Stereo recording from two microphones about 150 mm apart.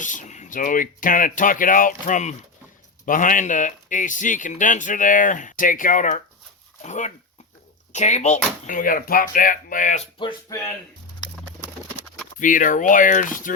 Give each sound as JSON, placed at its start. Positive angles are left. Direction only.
{"t": 0.0, "sound": "speech", "side_deg": 55}
{"t": 8.6, "sound": "speech", "side_deg": 65}
{"t": 10.2, "sound": "speech", "side_deg": 30}
{"t": 12.4, "sound": "speech", "side_deg": 60}